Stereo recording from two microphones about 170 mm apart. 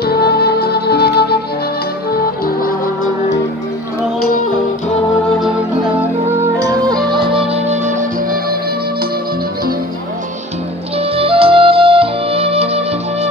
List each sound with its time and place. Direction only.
0.0 s music: 70° left (ahead or behind)
2.4 s music: 55° left (ahead or behind)
7.1 s music: 30° right (ahead or behind); by 8.5 s 55° right (ahead or behind)
11.0 s music: 35° right (ahead or behind)